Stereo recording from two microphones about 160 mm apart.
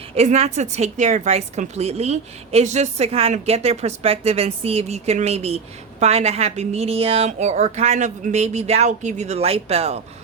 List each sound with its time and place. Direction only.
0.2 s a woman's voice: 45° right (ahead or behind)